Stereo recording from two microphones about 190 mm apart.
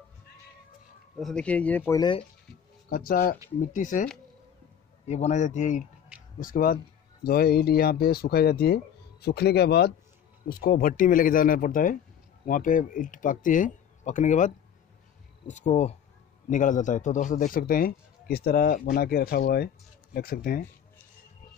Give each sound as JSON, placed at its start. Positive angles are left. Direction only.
{"t": 1.1, "sound": "speech", "side_deg": 5}
{"t": 3.1, "sound": "a man's voice", "side_deg": 50}
{"t": 6.1, "sound": "a sound", "side_deg": -5}
{"t": 6.4, "sound": "a man's voice", "side_deg": 50}